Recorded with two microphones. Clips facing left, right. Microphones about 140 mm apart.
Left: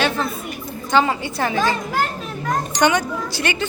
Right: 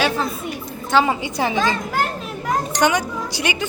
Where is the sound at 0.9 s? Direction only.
10° right (ahead or behind).